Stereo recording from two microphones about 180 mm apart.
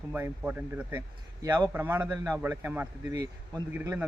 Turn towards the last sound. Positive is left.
turn(degrees=-10)  # may be behind; listen again after turning